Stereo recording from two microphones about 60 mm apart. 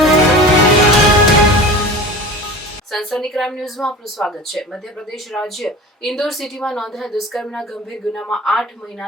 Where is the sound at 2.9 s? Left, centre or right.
Centre.